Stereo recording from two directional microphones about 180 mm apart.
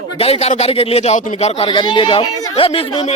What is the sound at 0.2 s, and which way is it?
Speech, 35° left (ahead or behind).